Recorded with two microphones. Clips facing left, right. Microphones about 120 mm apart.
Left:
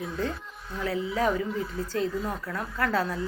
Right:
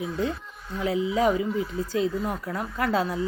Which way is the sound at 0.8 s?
15° right (ahead or behind).